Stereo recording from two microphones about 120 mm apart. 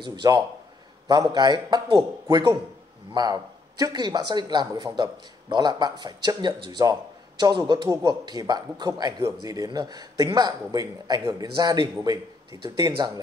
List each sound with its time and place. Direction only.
0.0 s speech: 35° right (ahead or behind)